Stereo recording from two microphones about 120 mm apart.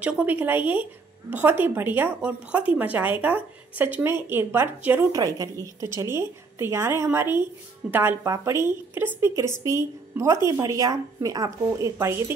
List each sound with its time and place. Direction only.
0.0 s a woman's voice: 10° right (ahead or behind)
5.1 s a woman's voice: 30° right (ahead or behind)